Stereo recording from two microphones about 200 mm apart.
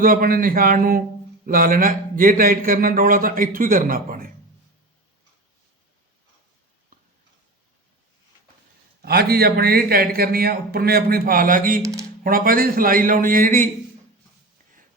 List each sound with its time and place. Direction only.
0.0 s a man's voice: 45° right (ahead or behind)
9.0 s a man's voice: 50° right (ahead or behind)
11.8 s speech: 15° right (ahead or behind)
12.2 s a man's voice: 45° right (ahead or behind)